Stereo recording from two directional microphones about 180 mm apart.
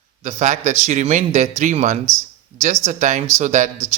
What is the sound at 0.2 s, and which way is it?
A man's voice, 40° right (ahead or behind).